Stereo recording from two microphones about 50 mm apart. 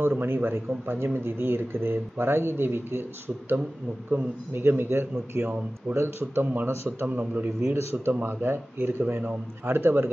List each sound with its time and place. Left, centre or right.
0.2 s speech: right
6.4 s a man's voice: right
7.6 s speech: right
8.2 s speech: right